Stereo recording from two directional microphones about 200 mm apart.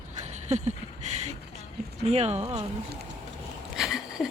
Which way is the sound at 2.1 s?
30° right (ahead or behind).